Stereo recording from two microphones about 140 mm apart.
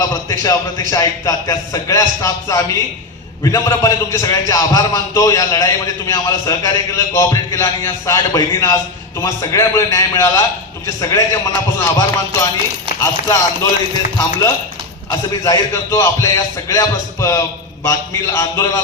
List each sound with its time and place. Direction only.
0.1 s a man's voice: 20° left (ahead or behind)
15.4 s a man's voice: 20° left (ahead or behind)